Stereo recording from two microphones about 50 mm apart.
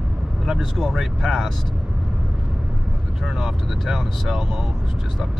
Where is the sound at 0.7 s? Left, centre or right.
Centre.